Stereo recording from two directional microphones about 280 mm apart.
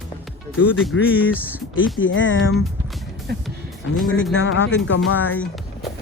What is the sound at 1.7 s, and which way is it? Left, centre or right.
Speech, left.